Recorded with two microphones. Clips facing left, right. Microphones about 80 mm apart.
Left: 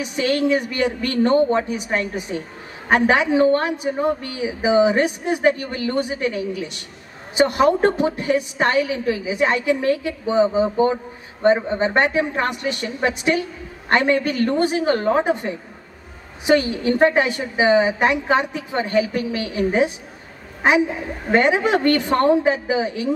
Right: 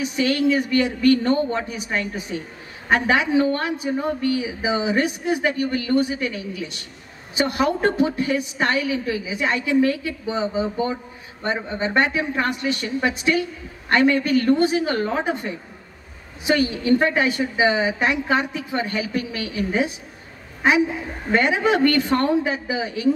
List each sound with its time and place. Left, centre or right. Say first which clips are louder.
0.1 s a woman's voice: left 2 dB; left
21.3 s a woman's voice: left 2 dB; left